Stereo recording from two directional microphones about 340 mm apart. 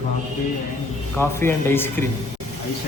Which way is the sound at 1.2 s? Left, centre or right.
Centre.